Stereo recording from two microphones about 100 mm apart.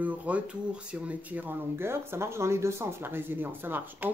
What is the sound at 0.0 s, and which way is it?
Speech, 15° right (ahead or behind).